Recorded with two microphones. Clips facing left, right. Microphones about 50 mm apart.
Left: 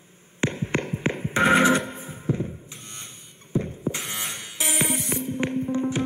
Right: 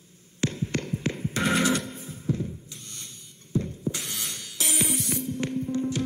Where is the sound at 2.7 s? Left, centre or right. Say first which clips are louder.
Left 3 dB; left.